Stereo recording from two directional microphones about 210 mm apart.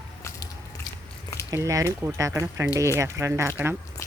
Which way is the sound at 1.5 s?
15° right (ahead or behind).